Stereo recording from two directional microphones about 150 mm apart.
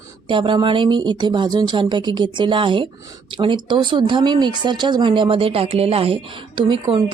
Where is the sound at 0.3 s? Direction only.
35° right (ahead or behind).